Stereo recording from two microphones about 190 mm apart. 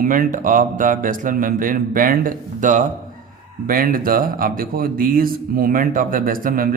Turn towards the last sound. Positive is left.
turn(degrees=-50)  # may be behind; listen again after turning